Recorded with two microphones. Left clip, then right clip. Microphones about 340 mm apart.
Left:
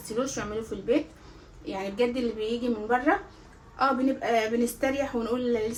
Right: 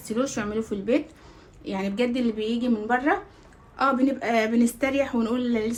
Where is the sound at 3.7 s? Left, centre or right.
Right.